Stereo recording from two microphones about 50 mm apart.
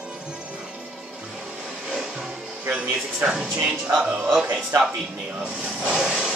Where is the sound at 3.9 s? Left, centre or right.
Centre.